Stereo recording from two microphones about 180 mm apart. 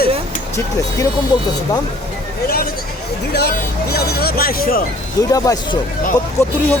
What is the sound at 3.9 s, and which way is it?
Speech, 60° left (ahead or behind).